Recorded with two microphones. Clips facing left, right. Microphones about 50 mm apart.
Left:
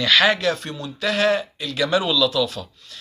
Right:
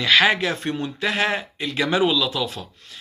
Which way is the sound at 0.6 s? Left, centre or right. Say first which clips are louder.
Right 4 dB; right.